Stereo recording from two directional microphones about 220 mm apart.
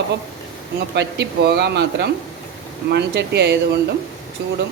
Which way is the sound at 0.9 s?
50° right (ahead or behind).